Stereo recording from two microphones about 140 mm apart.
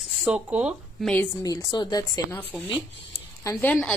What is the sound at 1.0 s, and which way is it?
Speech, 10° left (ahead or behind).